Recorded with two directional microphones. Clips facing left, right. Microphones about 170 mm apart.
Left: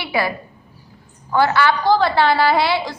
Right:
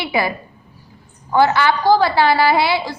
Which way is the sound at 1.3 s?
15° right (ahead or behind).